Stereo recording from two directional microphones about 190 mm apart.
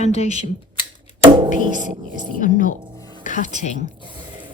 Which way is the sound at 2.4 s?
45° left (ahead or behind).